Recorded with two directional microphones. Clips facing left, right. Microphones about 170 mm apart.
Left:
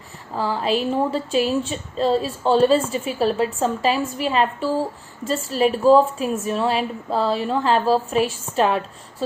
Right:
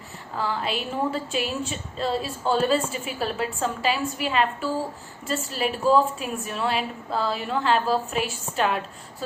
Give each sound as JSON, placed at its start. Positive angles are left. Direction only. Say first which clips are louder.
{"t": 0.3, "sound": "speech", "louder": "left 6 dB", "side_deg": 35}